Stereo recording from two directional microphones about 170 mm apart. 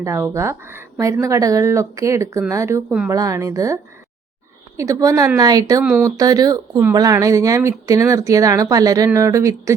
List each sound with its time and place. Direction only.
0.0 s speech: 20° right (ahead or behind)
4.8 s speech: 20° right (ahead or behind)